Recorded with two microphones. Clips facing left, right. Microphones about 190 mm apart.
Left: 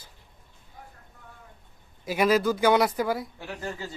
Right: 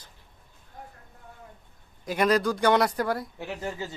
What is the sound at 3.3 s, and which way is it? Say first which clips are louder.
Speech: right 2 dB; 20° right (ahead or behind).